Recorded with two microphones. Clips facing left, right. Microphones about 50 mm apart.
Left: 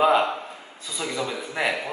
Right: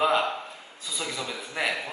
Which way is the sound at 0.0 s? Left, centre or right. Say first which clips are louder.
Left 4 dB; centre.